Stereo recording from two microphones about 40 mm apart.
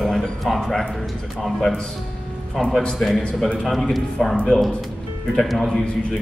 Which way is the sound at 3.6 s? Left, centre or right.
Centre.